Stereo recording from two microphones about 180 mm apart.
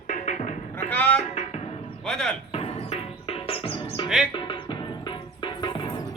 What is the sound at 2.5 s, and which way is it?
Music, 35° left (ahead or behind).